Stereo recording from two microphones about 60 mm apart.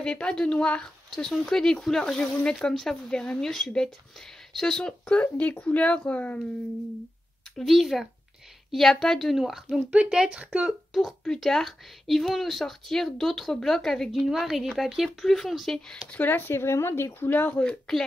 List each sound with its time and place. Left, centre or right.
0.0 s speech: centre
5.0 s speech: left
7.5 s speech: centre
9.4 s speech: centre
9.8 s speech: right
10.9 s speech: centre
14.1 s speech: centre
16.1 s speech: left
17.3 s speech: left
17.6 s speech: centre